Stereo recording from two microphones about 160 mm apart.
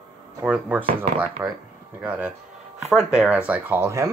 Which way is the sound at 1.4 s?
15° right (ahead or behind).